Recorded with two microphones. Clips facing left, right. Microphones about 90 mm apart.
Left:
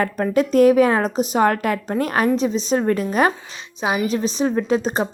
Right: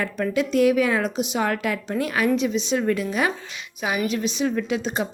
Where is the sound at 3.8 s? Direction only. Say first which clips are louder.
Left 4 dB; 25° left (ahead or behind).